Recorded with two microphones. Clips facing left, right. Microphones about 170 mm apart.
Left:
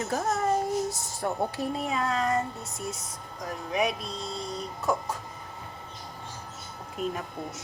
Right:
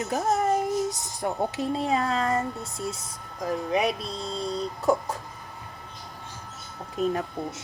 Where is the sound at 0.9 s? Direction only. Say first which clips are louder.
Right 1 dB; 20° right (ahead or behind).